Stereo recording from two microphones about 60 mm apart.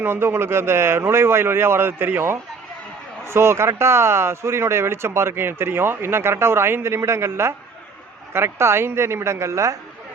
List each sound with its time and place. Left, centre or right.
0.0 s speech: right